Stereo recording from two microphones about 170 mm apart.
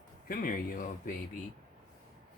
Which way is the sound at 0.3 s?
55° left (ahead or behind).